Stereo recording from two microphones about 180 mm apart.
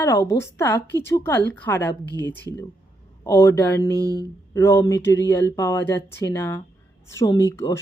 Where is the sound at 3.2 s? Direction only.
15° left (ahead or behind).